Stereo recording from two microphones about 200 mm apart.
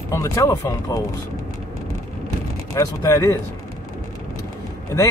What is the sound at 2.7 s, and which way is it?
Speech, 15° left (ahead or behind).